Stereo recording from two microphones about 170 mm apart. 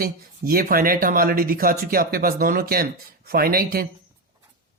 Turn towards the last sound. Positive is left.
turn(degrees=-60)  # may be behind; listen again after turning